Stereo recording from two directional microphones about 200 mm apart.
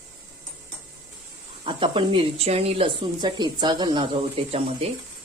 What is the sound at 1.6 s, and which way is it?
Speech, 25° right (ahead or behind).